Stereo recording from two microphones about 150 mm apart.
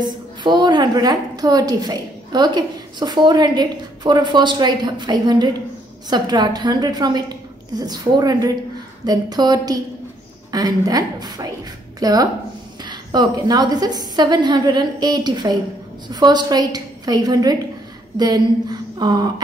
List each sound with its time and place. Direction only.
0.0 s a woman's voice: 30° right (ahead or behind)